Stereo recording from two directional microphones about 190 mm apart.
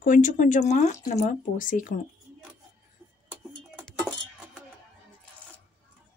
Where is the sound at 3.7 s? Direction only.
Centre (ahead or behind).